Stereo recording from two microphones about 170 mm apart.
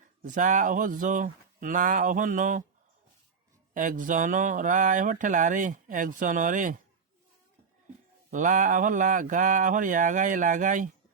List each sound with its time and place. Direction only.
0.2 s speech: 50° right (ahead or behind)
3.8 s speech: 50° right (ahead or behind)
8.3 s speech: 50° right (ahead or behind)